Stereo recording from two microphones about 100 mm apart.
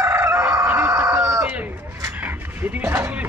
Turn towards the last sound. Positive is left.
turn(degrees=-20)  # may be behind; listen again after turning